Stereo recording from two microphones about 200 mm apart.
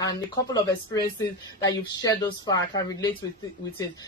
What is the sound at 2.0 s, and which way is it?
Speech, 20° left (ahead or behind).